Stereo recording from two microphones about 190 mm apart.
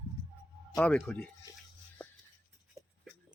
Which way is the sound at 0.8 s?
5° left (ahead or behind).